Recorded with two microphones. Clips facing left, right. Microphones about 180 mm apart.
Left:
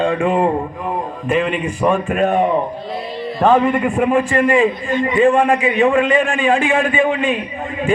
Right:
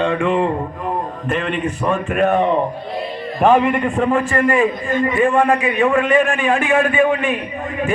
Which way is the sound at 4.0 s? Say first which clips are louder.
Left 2 dB; 15° left (ahead or behind).